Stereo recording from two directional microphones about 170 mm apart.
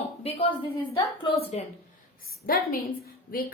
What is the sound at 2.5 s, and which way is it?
Speech, 60° left (ahead or behind).